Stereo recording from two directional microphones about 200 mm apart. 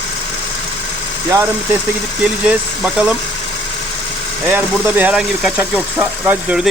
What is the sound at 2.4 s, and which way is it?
Speech, 5° right (ahead or behind).